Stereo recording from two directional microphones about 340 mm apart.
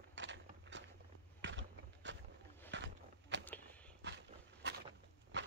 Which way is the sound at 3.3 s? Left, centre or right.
Right.